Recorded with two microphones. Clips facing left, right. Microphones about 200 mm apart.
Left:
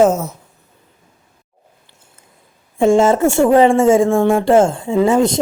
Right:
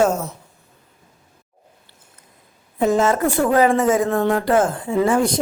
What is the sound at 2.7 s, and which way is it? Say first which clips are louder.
A woman's voice: left 5 dB; 25° left (ahead or behind).